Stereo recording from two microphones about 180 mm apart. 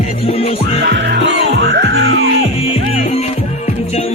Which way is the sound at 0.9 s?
70° right (ahead or behind).